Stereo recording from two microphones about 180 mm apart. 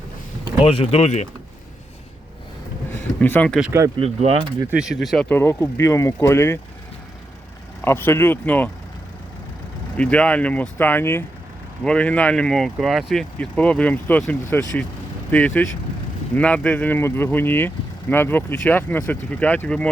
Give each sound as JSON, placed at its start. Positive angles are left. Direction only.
{"t": 0.6, "sound": "speech", "side_deg": 30}
{"t": 2.9, "sound": "a sound", "side_deg": 10}
{"t": 3.6, "sound": "speech", "side_deg": -15}
{"t": 4.0, "sound": "mechanisms", "side_deg": -35}
{"t": 4.6, "sound": "speech", "side_deg": -5}
{"t": 5.3, "sound": "speech", "side_deg": 15}
{"t": 7.8, "sound": "speech", "side_deg": 10}
{"t": 10.0, "sound": "speech", "side_deg": 5}